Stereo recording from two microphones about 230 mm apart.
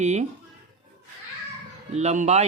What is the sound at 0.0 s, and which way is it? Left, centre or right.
Speech, right.